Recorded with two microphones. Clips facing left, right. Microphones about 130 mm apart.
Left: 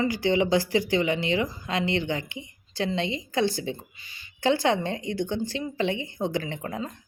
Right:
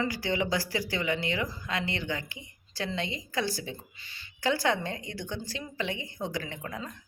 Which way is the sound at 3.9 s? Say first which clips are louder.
Left 2 dB; 15° left (ahead or behind).